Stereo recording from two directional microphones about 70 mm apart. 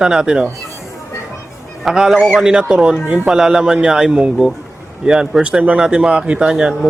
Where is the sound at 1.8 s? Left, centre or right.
Centre.